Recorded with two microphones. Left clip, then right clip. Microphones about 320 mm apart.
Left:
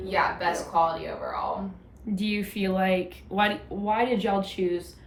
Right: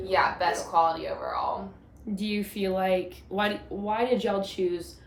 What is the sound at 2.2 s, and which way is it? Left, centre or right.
A woman's voice, left.